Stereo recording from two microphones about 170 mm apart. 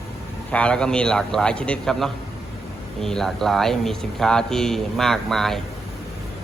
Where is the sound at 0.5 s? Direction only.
5° left (ahead or behind).